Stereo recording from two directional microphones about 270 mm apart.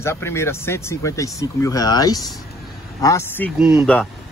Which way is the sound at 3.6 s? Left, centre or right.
Centre.